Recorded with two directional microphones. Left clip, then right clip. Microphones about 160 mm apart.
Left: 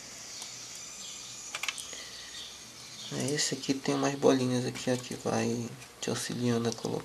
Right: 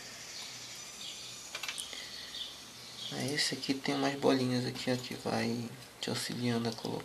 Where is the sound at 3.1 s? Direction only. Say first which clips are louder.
Left 2 dB; 30° left (ahead or behind).